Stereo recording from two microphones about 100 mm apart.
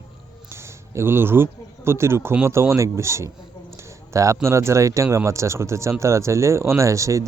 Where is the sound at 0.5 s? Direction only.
25° right (ahead or behind).